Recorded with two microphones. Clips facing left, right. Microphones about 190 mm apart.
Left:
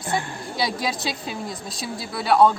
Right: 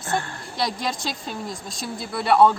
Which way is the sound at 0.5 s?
5° left (ahead or behind).